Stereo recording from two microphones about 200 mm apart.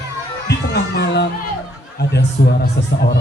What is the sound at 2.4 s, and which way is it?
Speech, 60° left (ahead or behind).